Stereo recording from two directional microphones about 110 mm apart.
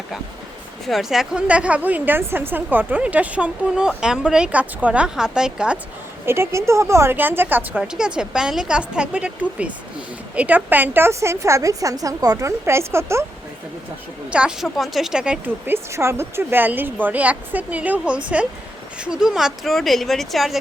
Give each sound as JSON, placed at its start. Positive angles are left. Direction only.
{"t": 0.9, "sound": "a woman's voice", "side_deg": 0}
{"t": 6.2, "sound": "a woman's voice", "side_deg": -25}
{"t": 7.8, "sound": "a woman's voice", "side_deg": -5}
{"t": 14.3, "sound": "a woman's voice", "side_deg": -10}